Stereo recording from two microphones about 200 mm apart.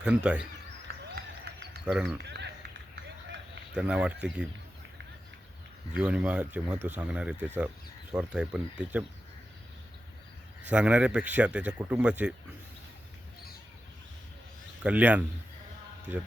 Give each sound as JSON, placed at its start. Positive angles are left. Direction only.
{"t": 0.0, "sound": "speech", "side_deg": -5}
{"t": 1.5, "sound": "a sound", "side_deg": -55}
{"t": 1.9, "sound": "speech", "side_deg": 0}
{"t": 2.2, "sound": "run", "side_deg": -60}
{"t": 3.8, "sound": "a man's voice", "side_deg": -5}
{"t": 6.0, "sound": "a man's voice", "side_deg": -5}
{"t": 10.7, "sound": "a man's voice", "side_deg": -5}
{"t": 14.8, "sound": "a man's voice", "side_deg": -5}